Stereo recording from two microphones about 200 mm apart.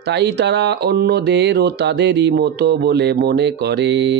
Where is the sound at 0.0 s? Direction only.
55° right (ahead or behind).